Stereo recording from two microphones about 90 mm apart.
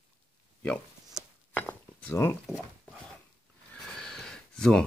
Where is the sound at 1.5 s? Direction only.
15° left (ahead or behind).